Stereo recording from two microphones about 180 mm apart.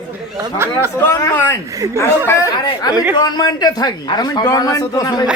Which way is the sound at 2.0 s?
15° left (ahead or behind).